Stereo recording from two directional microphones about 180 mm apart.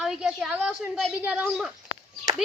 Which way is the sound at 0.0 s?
5° right (ahead or behind).